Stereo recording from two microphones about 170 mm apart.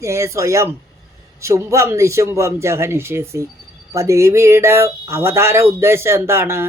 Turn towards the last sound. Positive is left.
turn(degrees=-15)  # may be behind; listen again after turning